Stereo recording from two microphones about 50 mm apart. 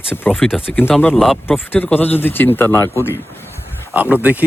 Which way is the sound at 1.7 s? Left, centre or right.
Left.